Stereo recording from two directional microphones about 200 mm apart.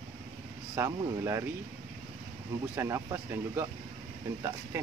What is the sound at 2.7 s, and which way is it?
Speech, 15° right (ahead or behind).